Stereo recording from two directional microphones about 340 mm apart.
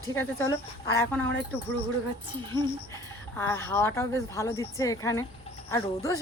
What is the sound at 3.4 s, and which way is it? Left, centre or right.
Speech, centre.